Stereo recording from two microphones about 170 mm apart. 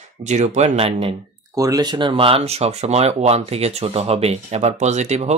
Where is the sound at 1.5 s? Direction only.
20° right (ahead or behind).